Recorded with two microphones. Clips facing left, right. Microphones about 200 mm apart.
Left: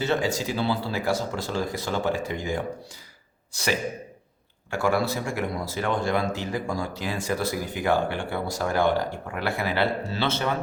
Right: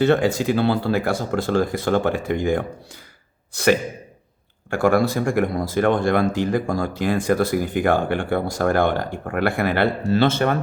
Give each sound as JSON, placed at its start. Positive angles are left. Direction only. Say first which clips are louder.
{"t": 0.0, "sound": "speech", "louder": "right 7 dB", "side_deg": -55}